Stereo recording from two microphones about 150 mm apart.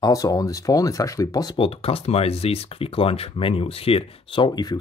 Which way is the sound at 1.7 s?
40° left (ahead or behind).